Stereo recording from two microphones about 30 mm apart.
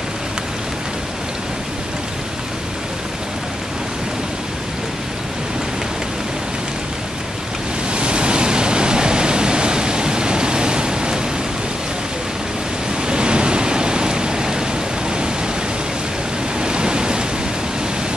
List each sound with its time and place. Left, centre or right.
7.9 s pink noise: right
13.0 s rain: right
16.5 s rain: right